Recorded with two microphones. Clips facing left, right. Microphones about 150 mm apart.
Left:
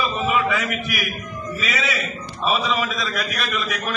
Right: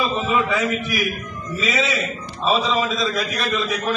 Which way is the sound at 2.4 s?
30° right (ahead or behind).